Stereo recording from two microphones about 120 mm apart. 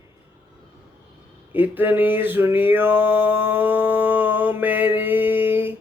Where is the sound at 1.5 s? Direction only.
15° right (ahead or behind).